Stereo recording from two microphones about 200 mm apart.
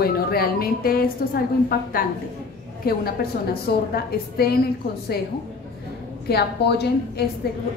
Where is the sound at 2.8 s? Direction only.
50° left (ahead or behind).